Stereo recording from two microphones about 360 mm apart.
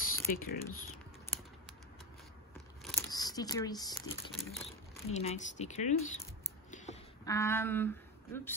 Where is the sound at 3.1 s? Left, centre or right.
Centre.